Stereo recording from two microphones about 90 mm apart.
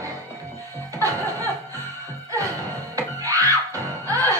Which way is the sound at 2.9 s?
35° right (ahead or behind).